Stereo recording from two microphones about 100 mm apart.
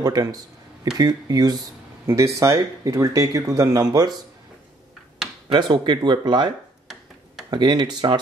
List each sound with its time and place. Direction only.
0.0 s speech: 40° right (ahead or behind)
2.0 s speech: 30° right (ahead or behind)
5.5 s speech: 50° right (ahead or behind)
7.5 s speech: 50° right (ahead or behind)